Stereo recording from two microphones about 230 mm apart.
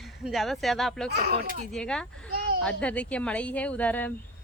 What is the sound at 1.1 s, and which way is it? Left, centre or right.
Speech, right.